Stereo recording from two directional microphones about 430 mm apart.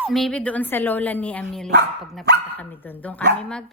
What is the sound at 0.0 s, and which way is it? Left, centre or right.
Speech, centre.